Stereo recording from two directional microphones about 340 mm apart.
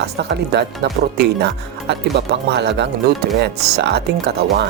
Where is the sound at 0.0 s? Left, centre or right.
Right.